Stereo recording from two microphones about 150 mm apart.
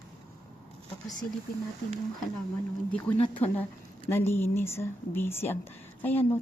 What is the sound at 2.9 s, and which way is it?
Speech, 10° left (ahead or behind).